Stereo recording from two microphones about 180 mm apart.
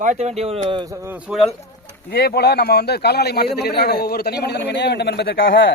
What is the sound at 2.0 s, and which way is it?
A man's voice, 60° left (ahead or behind).